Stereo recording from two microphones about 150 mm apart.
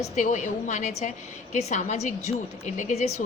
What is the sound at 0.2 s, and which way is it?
A woman's voice, 55° left (ahead or behind).